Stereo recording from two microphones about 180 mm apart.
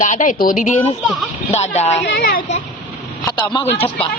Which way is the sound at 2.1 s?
55° left (ahead or behind).